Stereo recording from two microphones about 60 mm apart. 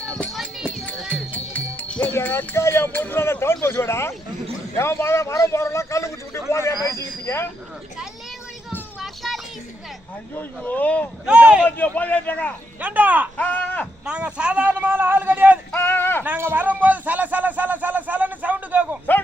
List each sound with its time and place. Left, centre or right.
1.3 s music: left
2.2 s speech: left
2.6 s a man's voice: left
2.9 s a man's voice: left
9.0 s children playing: centre
10.3 s speech: left
11.3 s speech: centre
11.6 s speech: left
12.8 s speech: right
13.3 s a sound: left
14.0 s speech: centre
14.7 s a man's voice: right
15.7 s a sound: left
16.4 s speech: right